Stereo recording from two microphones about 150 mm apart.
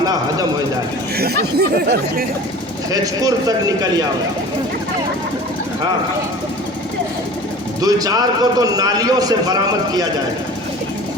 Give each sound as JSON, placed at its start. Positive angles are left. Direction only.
{"t": 0.0, "sound": "a sound", "side_deg": -25}
{"t": 1.2, "sound": "speech", "side_deg": -90}
{"t": 2.9, "sound": "a man's voice", "side_deg": -25}
{"t": 7.8, "sound": "a man's voice", "side_deg": -25}